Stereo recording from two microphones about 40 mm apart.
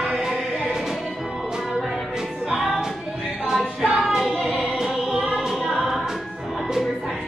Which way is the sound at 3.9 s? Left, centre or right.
Centre.